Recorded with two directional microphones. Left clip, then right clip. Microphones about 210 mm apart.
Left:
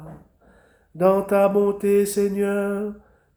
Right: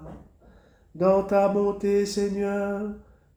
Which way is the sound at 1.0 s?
30° left (ahead or behind).